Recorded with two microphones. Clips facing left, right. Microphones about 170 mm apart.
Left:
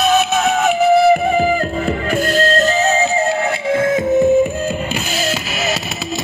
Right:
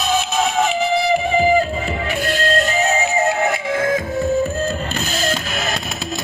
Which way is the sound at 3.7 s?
25° left (ahead or behind).